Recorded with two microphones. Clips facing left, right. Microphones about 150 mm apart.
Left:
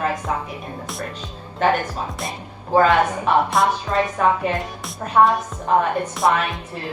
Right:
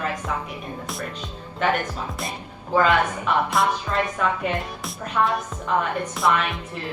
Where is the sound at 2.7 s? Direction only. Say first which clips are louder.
Left 4 dB; 35° left (ahead or behind).